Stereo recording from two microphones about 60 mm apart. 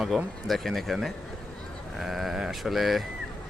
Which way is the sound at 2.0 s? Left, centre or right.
Centre.